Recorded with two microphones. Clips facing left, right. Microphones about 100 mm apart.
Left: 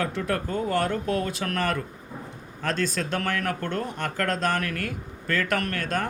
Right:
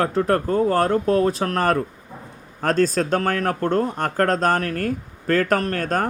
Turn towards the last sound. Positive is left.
turn(degrees=-40)  # may be behind; listen again after turning